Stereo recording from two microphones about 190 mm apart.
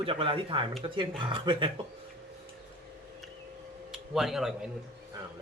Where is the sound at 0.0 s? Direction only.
30° right (ahead or behind).